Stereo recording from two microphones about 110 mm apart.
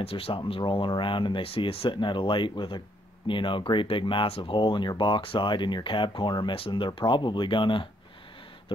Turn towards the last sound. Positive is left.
turn(degrees=50)  # may be behind; listen again after turning